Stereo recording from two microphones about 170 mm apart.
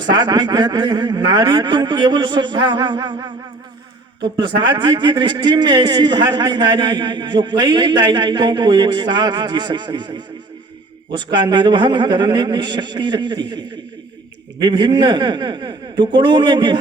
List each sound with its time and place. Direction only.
0.0 s a man's voice: 25° right (ahead or behind)